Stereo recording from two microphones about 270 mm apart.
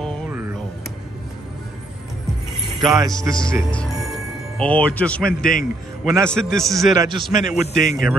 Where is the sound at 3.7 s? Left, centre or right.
Centre.